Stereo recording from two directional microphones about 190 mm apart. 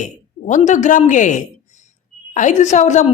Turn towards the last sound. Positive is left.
turn(degrees=40)  # may be behind; listen again after turning